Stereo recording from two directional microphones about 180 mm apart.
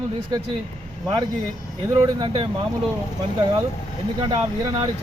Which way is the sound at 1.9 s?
25° right (ahead or behind).